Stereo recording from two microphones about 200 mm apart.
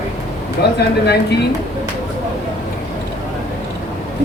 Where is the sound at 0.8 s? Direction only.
55° left (ahead or behind).